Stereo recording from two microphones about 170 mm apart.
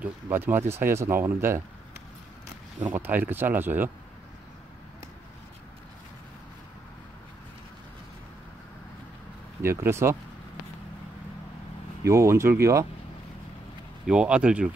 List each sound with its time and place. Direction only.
0.0 s speech: 10° right (ahead or behind)
2.9 s speech: 10° right (ahead or behind)
9.6 s speech: 15° right (ahead or behind)
12.0 s speech: 15° right (ahead or behind)
14.0 s speech: 5° right (ahead or behind)